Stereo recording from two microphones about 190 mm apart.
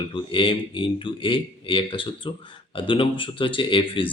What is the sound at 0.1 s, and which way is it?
Speech, 25° left (ahead or behind).